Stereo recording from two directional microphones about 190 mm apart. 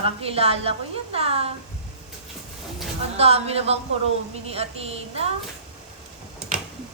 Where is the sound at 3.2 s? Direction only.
30° right (ahead or behind).